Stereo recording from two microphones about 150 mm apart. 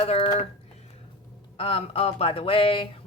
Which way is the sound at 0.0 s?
35° left (ahead or behind).